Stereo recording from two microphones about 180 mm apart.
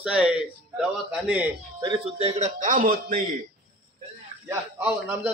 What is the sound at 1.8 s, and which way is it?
A man's voice, 30° right (ahead or behind).